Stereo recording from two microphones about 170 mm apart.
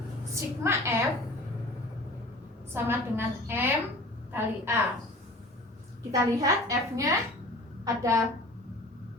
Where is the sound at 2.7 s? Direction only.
15° right (ahead or behind).